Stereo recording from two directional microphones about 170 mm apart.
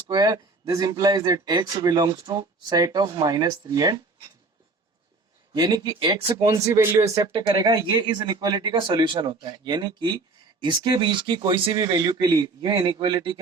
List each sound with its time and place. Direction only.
0.1 s speech: 25° right (ahead or behind)
5.5 s speech: 25° right (ahead or behind)